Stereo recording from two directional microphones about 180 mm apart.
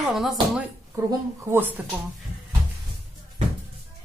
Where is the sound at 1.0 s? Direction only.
15° right (ahead or behind).